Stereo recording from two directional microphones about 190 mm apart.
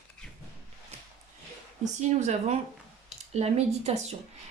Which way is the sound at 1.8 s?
40° right (ahead or behind).